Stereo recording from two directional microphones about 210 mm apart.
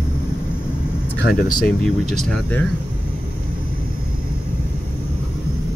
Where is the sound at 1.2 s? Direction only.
45° left (ahead or behind).